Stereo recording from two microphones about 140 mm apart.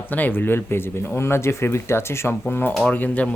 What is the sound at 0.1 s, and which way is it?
Speech, 10° left (ahead or behind).